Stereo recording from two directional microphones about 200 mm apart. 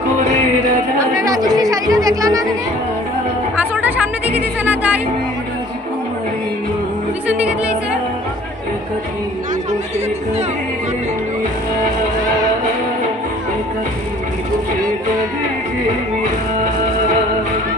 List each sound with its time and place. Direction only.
0.9 s chatter: 15° right (ahead or behind)
4.4 s music: 10° right (ahead or behind)
7.2 s music: 5° right (ahead or behind)
9.7 s a sound: 35° right (ahead or behind)